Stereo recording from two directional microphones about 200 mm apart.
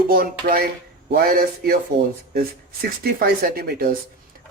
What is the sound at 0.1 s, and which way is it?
Speech, 50° right (ahead or behind).